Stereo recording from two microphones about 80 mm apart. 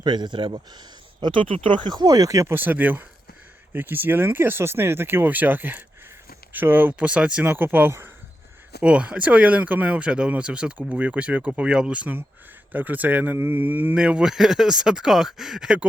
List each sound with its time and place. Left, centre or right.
0.0 s speech: right
2.5 s speech: right; by 15.9 s centre